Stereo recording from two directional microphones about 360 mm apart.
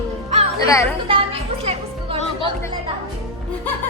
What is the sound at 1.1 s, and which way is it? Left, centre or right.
Speech, centre.